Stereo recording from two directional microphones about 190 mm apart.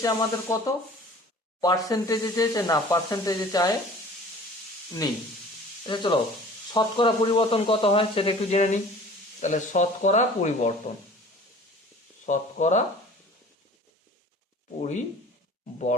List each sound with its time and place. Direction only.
0.0 s speech: 20° left (ahead or behind)
5.8 s speech: 25° left (ahead or behind)
12.2 s speech: 40° left (ahead or behind)
14.8 s speech: 40° left (ahead or behind)